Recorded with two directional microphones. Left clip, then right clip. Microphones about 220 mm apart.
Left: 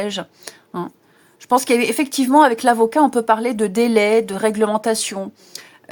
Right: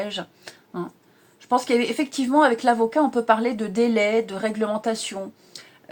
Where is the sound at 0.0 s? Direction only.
45° left (ahead or behind).